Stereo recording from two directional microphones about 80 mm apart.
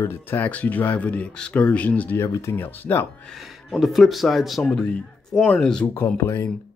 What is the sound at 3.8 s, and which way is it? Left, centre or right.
A man's voice, centre.